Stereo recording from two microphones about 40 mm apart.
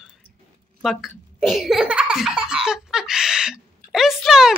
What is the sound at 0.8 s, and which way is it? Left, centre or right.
Speech, centre.